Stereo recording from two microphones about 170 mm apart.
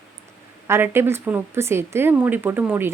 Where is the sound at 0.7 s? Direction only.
15° right (ahead or behind).